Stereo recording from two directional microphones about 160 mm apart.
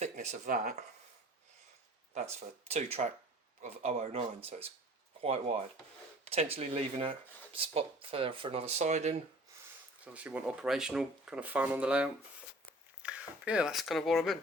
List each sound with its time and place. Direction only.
0.0 s speech: 45° right (ahead or behind)
2.1 s speech: 40° right (ahead or behind)
10.0 s speech: 10° right (ahead or behind)